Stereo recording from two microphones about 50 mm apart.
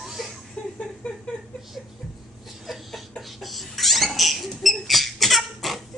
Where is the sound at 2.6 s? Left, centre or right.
Centre.